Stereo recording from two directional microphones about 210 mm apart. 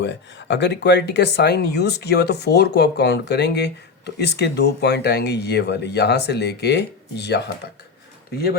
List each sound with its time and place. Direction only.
0.0 s speech: 55° left (ahead or behind)